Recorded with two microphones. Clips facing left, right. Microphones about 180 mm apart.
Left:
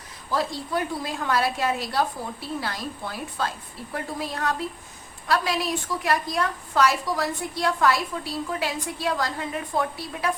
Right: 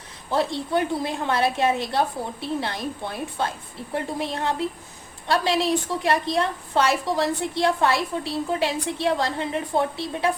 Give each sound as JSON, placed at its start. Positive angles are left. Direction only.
{"t": 0.3, "sound": "a woman's voice", "side_deg": -25}